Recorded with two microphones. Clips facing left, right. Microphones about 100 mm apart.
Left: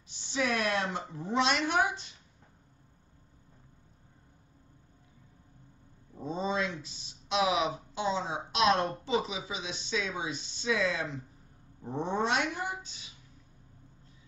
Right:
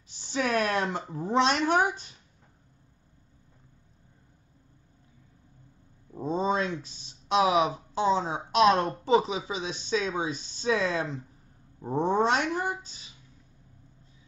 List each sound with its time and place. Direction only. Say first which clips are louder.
0.3 s speech: right 3 dB; 45° right (ahead or behind)
6.1 s speech: right 5 dB; 45° right (ahead or behind)
11.8 s cat: right 6 dB; 45° right (ahead or behind)